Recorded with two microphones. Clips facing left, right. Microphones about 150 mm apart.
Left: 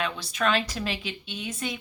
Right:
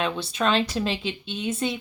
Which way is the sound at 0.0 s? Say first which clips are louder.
Right 3 dB; 25° right (ahead or behind).